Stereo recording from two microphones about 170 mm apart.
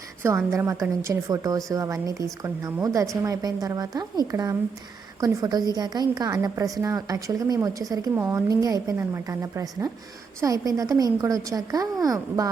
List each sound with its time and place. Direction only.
0.2 s a woman's voice: 15° right (ahead or behind)